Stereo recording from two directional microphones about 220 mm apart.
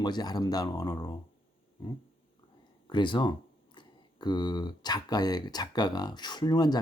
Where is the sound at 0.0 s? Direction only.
20° left (ahead or behind).